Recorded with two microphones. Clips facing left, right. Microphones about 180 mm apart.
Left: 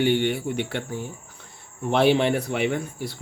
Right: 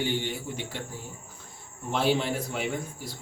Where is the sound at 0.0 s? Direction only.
65° left (ahead or behind).